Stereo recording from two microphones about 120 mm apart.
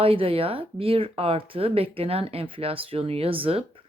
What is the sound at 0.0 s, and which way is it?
Speech, 50° right (ahead or behind).